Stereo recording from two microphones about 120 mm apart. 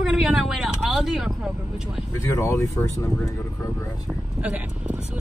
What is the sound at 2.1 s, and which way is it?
Speech, 25° left (ahead or behind).